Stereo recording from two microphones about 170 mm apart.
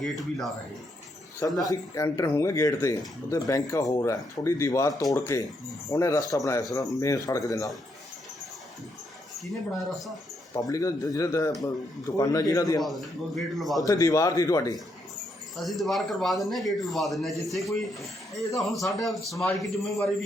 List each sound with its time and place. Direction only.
0.0 s a man's voice: centre (ahead or behind)
1.4 s a man's voice: 20° left (ahead or behind)
10.5 s a man's voice: 20° left (ahead or behind)
12.8 s a man's voice: centre (ahead or behind)
13.8 s a man's voice: 20° left (ahead or behind)
15.5 s a man's voice: centre (ahead or behind)